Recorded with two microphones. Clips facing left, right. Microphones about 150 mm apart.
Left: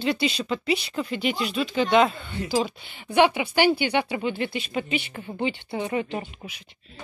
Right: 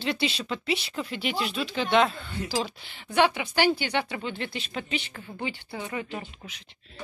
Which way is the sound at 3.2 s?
15° left (ahead or behind).